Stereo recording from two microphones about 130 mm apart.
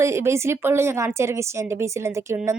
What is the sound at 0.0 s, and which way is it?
Speech, 20° right (ahead or behind).